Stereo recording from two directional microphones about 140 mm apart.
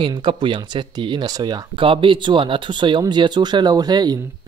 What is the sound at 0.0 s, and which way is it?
Speech, 35° right (ahead or behind).